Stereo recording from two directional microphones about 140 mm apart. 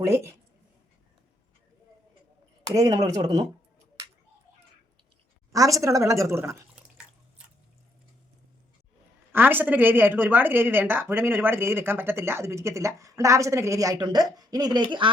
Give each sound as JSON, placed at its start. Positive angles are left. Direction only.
{"t": 2.6, "sound": "a woman's voice", "side_deg": -25}
{"t": 5.5, "sound": "a woman's voice", "side_deg": -25}
{"t": 9.3, "sound": "speech", "side_deg": -15}